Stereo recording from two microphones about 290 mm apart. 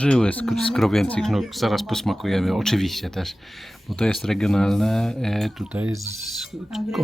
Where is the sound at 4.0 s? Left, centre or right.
Centre.